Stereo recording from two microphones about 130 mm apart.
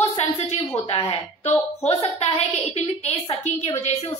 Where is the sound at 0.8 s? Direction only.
50° left (ahead or behind).